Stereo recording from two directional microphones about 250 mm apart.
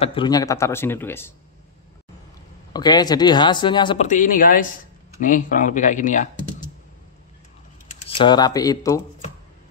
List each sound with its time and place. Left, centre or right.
0.0 s speech: centre
2.7 s speech: centre
4.1 s speech: left
8.0 s speech: left